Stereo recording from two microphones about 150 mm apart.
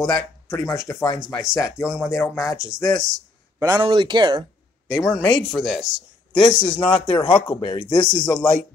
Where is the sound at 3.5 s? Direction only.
25° right (ahead or behind).